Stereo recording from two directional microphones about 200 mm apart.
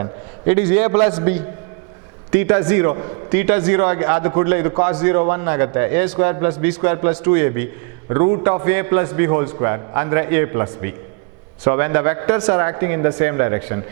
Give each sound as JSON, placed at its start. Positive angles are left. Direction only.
{"t": 0.0, "sound": "a man's voice", "side_deg": -10}